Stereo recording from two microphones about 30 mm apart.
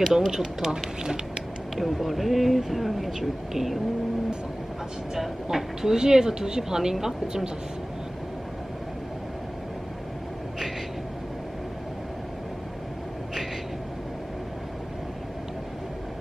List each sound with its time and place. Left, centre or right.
0.0 s speech: centre
1.8 s speech: centre
5.1 s speech: centre
5.8 s speech: right